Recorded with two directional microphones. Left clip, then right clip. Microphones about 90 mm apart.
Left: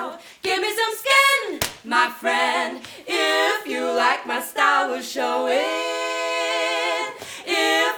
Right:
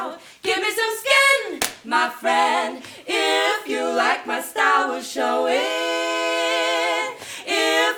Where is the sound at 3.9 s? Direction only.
45° left (ahead or behind).